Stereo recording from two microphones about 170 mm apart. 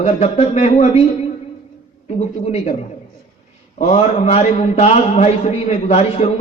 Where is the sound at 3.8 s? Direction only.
40° left (ahead or behind).